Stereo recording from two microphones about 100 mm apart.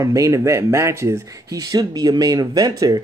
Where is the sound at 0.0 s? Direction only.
30° right (ahead or behind).